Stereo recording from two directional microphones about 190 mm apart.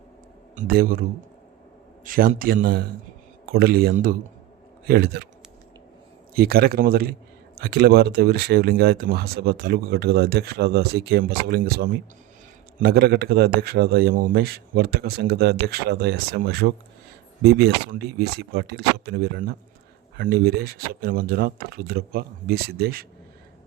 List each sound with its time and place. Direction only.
0.5 s a man's voice: 45° right (ahead or behind)
2.0 s a man's voice: 45° right (ahead or behind)
6.3 s a man's voice: 55° right (ahead or behind)